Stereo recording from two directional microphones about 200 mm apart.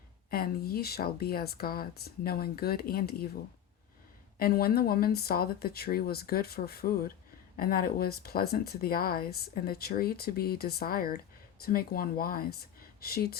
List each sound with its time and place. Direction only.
0.3 s speech: 50° left (ahead or behind)
4.4 s speech: 50° left (ahead or behind)